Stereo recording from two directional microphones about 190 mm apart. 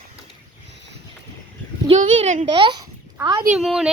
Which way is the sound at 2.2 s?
35° right (ahead or behind).